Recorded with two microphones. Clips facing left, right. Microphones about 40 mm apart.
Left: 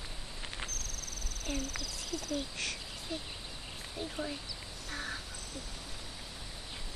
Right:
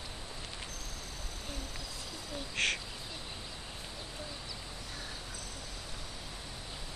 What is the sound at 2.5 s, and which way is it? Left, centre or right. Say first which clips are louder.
Speech: right 7 dB; right.